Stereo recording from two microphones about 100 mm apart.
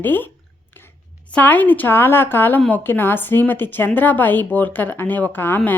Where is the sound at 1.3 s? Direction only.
15° left (ahead or behind).